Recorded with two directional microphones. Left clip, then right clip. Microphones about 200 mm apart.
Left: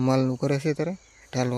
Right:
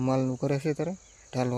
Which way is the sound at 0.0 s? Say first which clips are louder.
Left 4 dB; 20° left (ahead or behind).